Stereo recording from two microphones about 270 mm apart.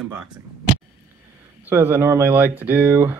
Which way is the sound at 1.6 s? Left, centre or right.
Centre.